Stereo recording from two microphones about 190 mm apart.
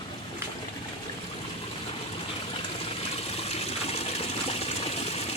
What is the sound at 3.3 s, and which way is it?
Water, 35° left (ahead or behind).